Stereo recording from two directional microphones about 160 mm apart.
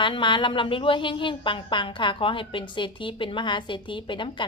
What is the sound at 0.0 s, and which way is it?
A woman's voice, 30° left (ahead or behind).